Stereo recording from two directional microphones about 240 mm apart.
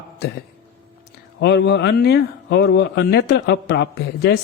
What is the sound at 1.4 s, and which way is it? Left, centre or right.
Speech, left.